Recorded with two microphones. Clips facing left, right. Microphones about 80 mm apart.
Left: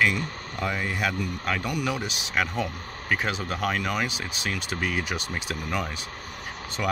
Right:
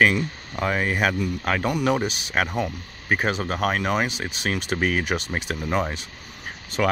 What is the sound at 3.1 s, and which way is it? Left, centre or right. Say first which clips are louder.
Speech: right 4 dB; right.